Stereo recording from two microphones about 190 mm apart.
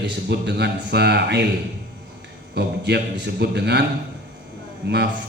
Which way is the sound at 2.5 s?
60° right (ahead or behind).